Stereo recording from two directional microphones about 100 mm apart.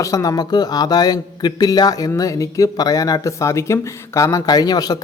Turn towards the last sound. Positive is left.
turn(degrees=40)  # may be behind; listen again after turning